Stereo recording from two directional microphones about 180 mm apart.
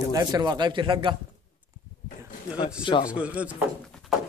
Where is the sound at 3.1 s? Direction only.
5° right (ahead or behind).